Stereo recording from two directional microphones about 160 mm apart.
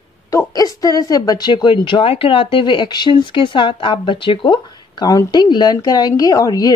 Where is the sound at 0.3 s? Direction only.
20° left (ahead or behind).